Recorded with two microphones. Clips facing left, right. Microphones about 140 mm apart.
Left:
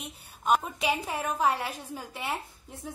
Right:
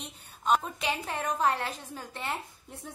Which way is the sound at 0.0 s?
5° left (ahead or behind).